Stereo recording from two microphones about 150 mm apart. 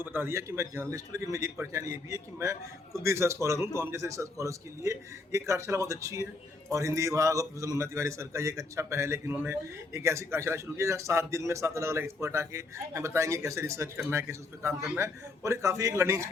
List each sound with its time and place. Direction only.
0.0 s a man's voice: 15° right (ahead or behind)